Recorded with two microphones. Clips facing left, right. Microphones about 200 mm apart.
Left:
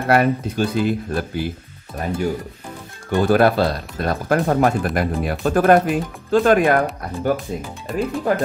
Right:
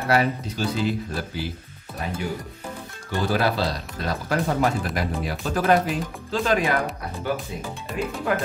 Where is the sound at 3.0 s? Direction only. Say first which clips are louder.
Left 8 dB; 55° left (ahead or behind).